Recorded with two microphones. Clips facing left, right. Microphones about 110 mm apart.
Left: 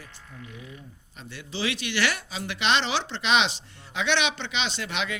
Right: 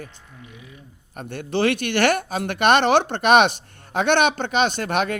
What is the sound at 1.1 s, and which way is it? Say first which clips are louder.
Speech: right 11 dB; 55° right (ahead or behind).